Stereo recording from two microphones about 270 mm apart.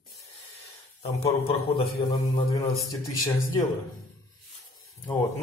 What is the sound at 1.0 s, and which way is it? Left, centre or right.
A man's voice, left.